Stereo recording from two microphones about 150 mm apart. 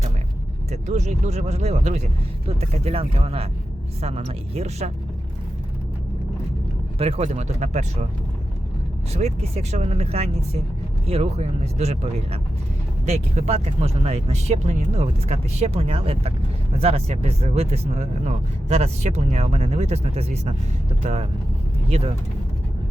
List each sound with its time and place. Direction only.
0.7 s speech: 50° right (ahead or behind)
7.0 s speech: 45° right (ahead or behind)
9.1 s speech: 45° right (ahead or behind)